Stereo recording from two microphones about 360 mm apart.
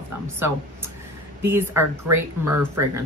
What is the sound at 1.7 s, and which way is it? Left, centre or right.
Speech, right.